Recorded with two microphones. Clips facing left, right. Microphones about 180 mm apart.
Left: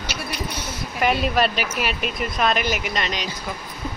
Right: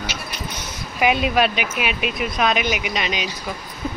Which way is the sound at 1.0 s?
5° right (ahead or behind).